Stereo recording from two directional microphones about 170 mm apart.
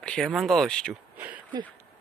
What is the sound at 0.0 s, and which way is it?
Speech, 5° left (ahead or behind).